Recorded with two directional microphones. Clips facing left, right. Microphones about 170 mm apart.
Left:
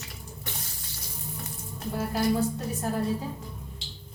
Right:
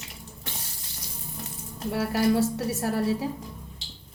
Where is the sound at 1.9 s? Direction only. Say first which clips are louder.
Right 3 dB; 80° right.